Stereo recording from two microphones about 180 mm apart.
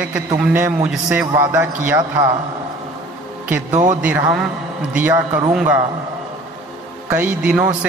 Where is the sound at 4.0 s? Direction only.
10° right (ahead or behind).